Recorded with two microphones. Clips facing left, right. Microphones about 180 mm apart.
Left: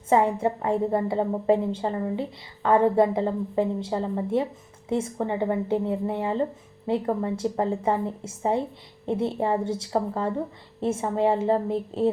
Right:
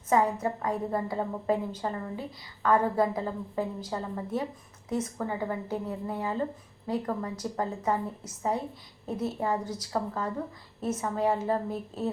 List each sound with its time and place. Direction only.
0.1 s a woman's voice: 25° left (ahead or behind)